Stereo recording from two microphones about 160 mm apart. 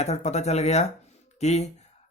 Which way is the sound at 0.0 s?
45° left (ahead or behind).